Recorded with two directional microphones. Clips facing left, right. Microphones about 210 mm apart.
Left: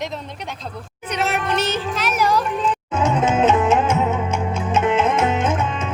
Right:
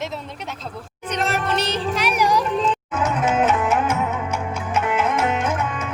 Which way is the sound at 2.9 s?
25° left (ahead or behind).